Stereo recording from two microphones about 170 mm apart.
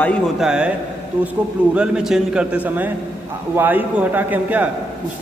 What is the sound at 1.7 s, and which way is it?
A man's voice, 5° right (ahead or behind).